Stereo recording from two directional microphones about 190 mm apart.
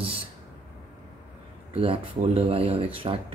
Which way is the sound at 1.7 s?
30° right (ahead or behind).